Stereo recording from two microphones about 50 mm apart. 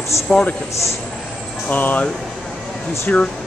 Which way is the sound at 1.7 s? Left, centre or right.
Left.